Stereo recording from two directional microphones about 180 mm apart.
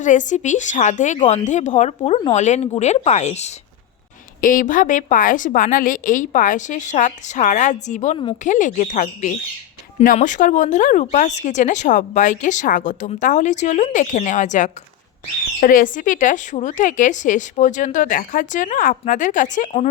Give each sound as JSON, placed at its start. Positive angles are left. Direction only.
{"t": 0.0, "sound": "speech", "side_deg": 45}
{"t": 2.0, "sound": "speech", "side_deg": 30}
{"t": 4.4, "sound": "speech", "side_deg": 50}